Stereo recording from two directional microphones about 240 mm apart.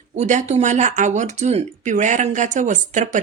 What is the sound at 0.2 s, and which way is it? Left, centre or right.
Speech, right.